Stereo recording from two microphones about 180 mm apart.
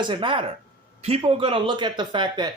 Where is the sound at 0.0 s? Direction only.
25° right (ahead or behind).